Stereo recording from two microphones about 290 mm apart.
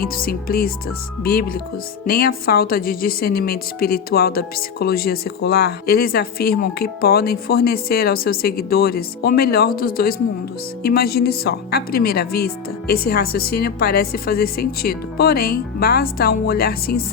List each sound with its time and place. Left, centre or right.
0.0 s speech: left